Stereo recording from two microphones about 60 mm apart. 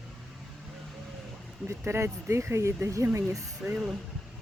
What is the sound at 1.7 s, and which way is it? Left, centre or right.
Speech, right.